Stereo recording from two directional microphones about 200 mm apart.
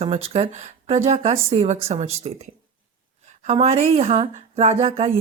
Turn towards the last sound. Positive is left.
turn(degrees=-30)  # may be behind; listen again after turning